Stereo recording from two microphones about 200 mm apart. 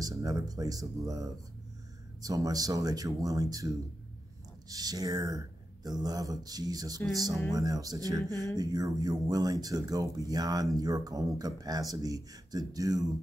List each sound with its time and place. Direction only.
0.0 s speech: 15° right (ahead or behind)